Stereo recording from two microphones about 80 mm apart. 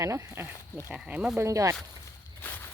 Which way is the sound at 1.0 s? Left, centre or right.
Centre.